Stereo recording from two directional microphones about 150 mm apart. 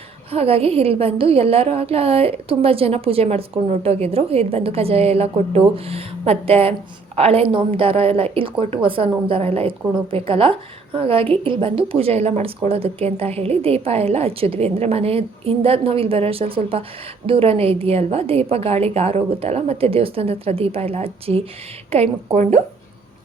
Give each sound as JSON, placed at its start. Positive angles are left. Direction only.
{"t": 0.3, "sound": "a woman's voice", "side_deg": -40}